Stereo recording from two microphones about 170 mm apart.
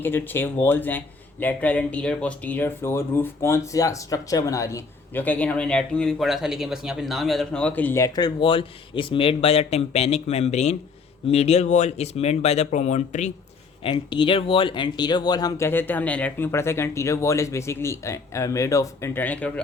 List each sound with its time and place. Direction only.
0.0 s speech: 10° left (ahead or behind); by 13.3 s 45° left (ahead or behind)
13.8 s speech: 30° left (ahead or behind); by 19.5 s 10° left (ahead or behind)